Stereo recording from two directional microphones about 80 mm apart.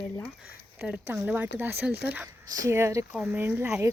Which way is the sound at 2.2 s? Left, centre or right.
Right.